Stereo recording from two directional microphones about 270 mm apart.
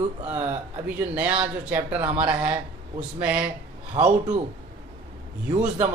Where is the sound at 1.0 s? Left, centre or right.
Centre.